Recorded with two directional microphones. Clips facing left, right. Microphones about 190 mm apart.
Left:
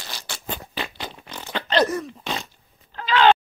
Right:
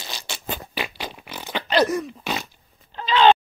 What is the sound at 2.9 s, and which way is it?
Groan, 20° right (ahead or behind).